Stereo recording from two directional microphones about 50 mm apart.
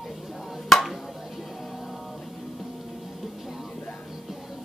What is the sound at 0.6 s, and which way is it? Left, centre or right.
Chop, centre.